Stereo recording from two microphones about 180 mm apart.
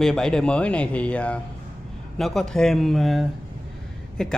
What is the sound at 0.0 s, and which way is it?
Speech, 5° left (ahead or behind).